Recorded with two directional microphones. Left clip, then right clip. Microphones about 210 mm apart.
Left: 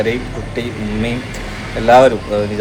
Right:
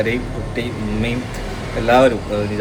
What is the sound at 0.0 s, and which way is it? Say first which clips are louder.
Speech: left 2 dB; centre (ahead or behind).